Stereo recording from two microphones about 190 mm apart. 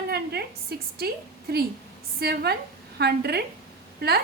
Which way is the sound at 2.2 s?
60° right (ahead or behind).